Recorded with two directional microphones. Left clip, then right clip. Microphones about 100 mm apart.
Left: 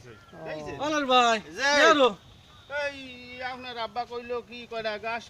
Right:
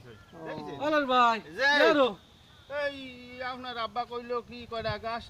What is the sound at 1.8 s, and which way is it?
Speech, 20° left (ahead or behind).